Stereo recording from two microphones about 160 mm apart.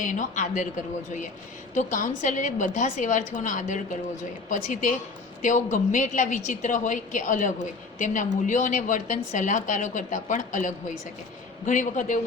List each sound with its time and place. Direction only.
0.0 s a woman's voice: 50° left (ahead or behind)